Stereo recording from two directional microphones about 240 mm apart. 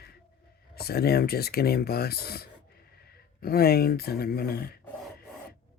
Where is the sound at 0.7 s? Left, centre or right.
Left.